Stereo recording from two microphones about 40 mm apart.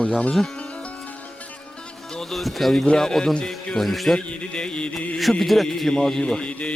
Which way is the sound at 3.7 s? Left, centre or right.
Centre.